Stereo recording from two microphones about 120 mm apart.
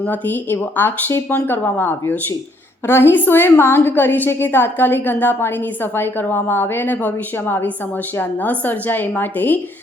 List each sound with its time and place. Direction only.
0.0 s a woman's voice: 15° left (ahead or behind)